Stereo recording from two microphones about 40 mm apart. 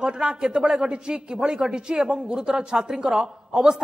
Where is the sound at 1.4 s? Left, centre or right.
Centre.